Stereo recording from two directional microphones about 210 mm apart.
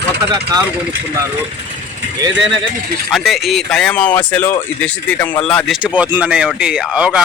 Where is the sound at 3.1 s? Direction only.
Centre (ahead or behind).